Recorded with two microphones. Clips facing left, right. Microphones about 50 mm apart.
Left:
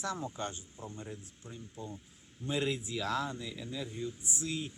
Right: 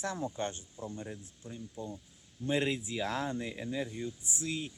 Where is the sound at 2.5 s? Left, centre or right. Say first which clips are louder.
Right 2 dB; right.